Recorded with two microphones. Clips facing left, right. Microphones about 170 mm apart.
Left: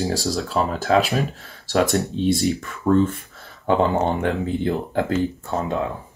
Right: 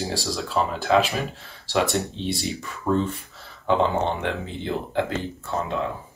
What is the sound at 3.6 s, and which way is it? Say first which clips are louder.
Speech: left 3 dB; 45° left (ahead or behind).